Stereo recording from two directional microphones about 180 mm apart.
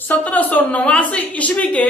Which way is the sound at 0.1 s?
10° left (ahead or behind).